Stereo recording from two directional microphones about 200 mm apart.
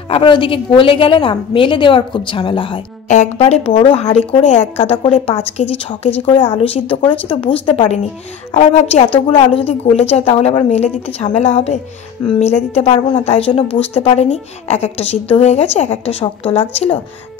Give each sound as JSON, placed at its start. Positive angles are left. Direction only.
{"t": 0.1, "sound": "a woman's voice", "side_deg": 25}